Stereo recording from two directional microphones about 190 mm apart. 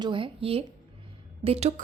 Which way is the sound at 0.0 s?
25° right (ahead or behind).